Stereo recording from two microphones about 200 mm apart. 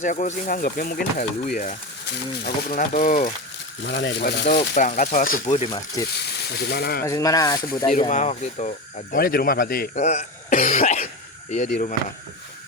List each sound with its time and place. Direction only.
0.0 s speech: 40° left (ahead or behind)
3.8 s speech: 60° left (ahead or behind)
4.7 s speech: 40° left (ahead or behind)
6.1 s speech: 55° left (ahead or behind)
7.0 s speech: 15° left (ahead or behind)
8.1 s speech: 35° left (ahead or behind)
9.1 s speech: 45° left (ahead or behind)
10.0 s speech: 35° left (ahead or behind)